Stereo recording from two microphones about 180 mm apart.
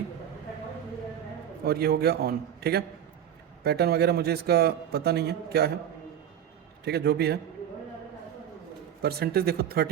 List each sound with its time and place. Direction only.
1.6 s a man's voice: 60° right (ahead or behind)
6.8 s a man's voice: 65° right (ahead or behind)
9.0 s a man's voice: 60° right (ahead or behind)